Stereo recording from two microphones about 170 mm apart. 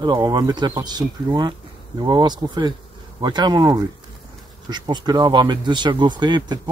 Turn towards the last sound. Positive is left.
turn(degrees=-25)  # may be behind; listen again after turning